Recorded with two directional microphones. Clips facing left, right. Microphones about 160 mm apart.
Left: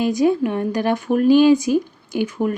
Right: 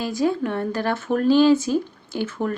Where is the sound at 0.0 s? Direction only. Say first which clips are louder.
Left 5 dB; 20° left (ahead or behind).